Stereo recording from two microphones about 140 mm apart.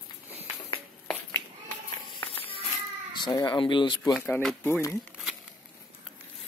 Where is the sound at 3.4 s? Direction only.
35° left (ahead or behind).